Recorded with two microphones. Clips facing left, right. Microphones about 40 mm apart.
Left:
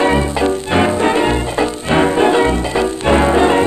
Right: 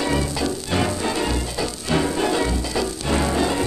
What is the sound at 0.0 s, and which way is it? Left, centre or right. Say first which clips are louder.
Music: left 9 dB; left.